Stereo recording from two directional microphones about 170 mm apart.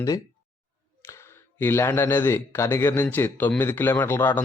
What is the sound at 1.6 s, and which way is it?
Speech, 15° left (ahead or behind).